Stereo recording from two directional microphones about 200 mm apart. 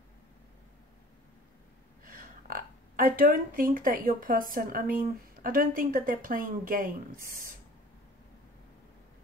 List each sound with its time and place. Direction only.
2.0 s speech: 45° right (ahead or behind)